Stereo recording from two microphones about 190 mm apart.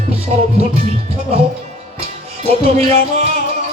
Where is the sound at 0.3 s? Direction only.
40° right (ahead or behind).